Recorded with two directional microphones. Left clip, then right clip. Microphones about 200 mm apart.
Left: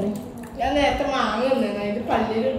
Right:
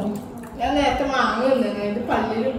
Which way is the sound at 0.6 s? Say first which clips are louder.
Even; centre (ahead or behind).